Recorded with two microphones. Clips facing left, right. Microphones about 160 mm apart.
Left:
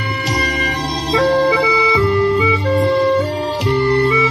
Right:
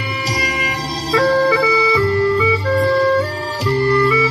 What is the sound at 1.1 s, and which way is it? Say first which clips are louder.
Music: even; 20° left (ahead or behind).